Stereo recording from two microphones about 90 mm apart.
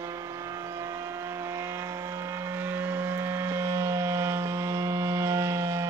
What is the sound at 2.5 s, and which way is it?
Vehicle, 25° right (ahead or behind).